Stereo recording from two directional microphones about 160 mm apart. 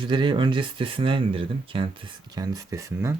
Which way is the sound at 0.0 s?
30° right (ahead or behind).